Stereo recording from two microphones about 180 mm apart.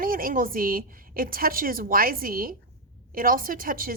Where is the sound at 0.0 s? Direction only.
50° right (ahead or behind).